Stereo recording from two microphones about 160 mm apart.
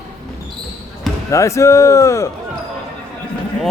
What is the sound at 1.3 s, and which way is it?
A man's voice, 20° left (ahead or behind).